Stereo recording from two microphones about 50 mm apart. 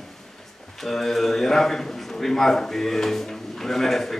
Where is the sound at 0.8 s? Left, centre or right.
Centre.